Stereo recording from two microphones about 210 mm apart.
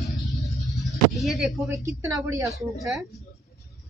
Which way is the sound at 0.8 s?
Centre (ahead or behind).